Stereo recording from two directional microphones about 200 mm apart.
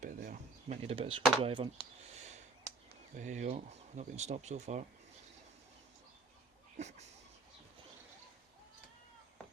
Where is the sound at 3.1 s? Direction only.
40° right (ahead or behind).